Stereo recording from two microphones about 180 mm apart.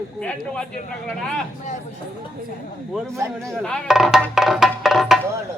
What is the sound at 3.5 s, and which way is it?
Speech, 5° left (ahead or behind).